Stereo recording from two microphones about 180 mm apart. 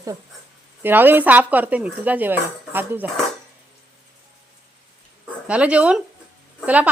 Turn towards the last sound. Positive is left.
turn(degrees=-10)  # may be behind; listen again after turning